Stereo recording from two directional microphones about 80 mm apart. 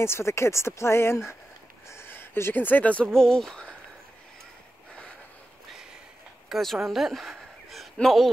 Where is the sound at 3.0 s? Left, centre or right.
Centre.